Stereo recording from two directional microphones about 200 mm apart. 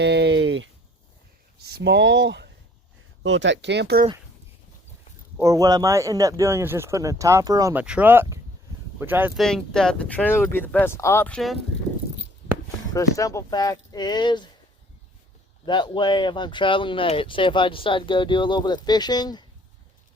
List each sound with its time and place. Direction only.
0.0 s a sound: 55° right (ahead or behind)
1.6 s speech: 55° right (ahead or behind)
5.4 s a man's voice: 15° right (ahead or behind)
9.4 s speech: centre (ahead or behind)
12.9 s speech: 15° left (ahead or behind)
15.6 s speech: 25° left (ahead or behind)